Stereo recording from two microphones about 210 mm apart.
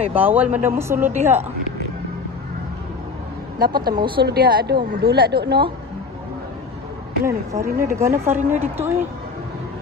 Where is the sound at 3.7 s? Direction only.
20° right (ahead or behind).